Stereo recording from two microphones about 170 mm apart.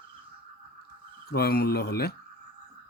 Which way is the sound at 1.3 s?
65° left (ahead or behind).